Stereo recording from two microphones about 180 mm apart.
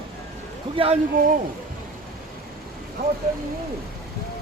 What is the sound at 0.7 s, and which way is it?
Speech, 30° right (ahead or behind).